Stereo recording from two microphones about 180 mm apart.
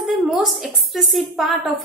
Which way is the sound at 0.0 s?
Centre (ahead or behind).